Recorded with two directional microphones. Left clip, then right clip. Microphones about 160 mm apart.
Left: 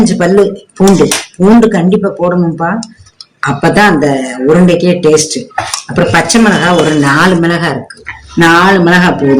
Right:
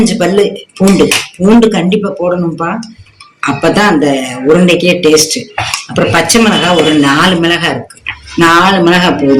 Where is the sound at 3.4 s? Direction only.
60° left (ahead or behind).